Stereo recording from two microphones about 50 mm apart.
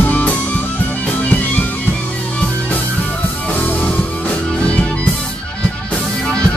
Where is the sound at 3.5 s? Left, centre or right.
Left.